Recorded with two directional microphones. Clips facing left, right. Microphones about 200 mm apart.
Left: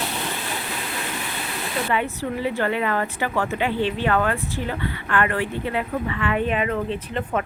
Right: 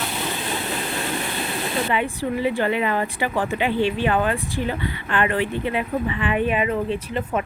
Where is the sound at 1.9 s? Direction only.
15° right (ahead or behind).